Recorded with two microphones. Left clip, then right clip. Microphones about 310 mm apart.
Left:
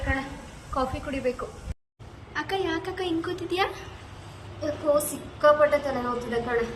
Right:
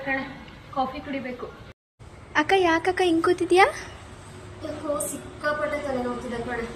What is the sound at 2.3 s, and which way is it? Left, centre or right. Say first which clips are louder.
A woman's voice: right 8 dB; centre.